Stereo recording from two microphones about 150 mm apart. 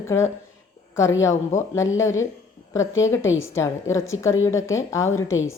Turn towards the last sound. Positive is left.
turn(degrees=20)  # may be behind; listen again after turning